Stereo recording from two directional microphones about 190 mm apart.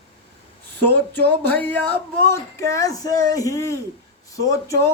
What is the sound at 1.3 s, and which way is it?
Speech, 10° left (ahead or behind).